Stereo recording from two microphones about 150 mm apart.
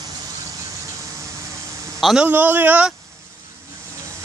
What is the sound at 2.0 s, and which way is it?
Speech, 5° right (ahead or behind).